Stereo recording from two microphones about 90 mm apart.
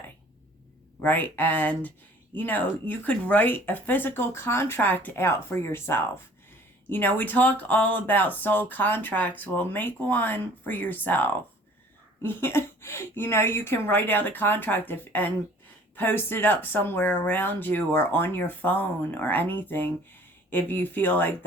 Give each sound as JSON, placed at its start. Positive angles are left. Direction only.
{"t": 1.0, "sound": "speech", "side_deg": 20}